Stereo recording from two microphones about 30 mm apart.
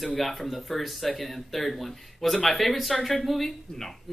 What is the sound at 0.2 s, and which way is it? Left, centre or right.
Speech, centre.